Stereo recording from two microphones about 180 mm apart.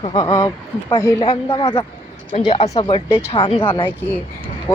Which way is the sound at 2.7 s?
25° left (ahead or behind).